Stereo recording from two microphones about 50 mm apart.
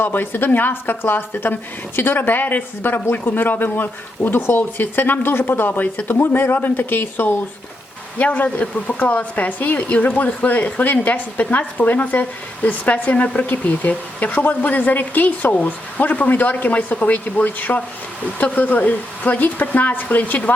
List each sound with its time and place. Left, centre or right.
0.0 s speech: left
8.2 s speech: left